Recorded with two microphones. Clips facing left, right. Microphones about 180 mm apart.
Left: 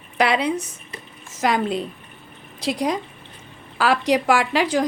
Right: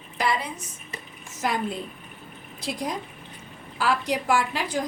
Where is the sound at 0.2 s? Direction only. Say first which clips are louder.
Left 7 dB; 80° left.